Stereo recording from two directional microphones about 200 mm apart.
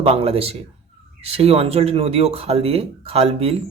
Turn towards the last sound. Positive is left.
turn(degrees=-30)  # may be behind; listen again after turning